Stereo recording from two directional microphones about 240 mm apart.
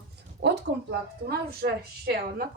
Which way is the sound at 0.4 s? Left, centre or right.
Right.